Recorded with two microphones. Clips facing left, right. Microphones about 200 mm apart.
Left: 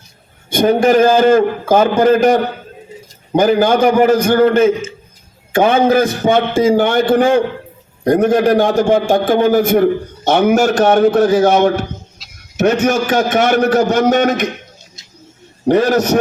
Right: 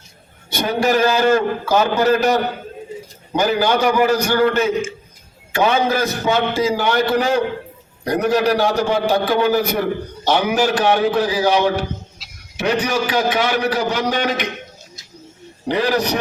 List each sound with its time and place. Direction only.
0.5 s a man's voice: 50° left (ahead or behind)
15.6 s a man's voice: 45° left (ahead or behind)